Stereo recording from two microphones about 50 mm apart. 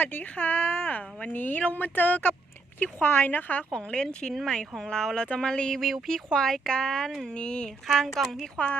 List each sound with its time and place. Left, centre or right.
0.0 s a woman's voice: left
3.7 s speech: centre
7.9 s speech: centre
8.5 s speech: left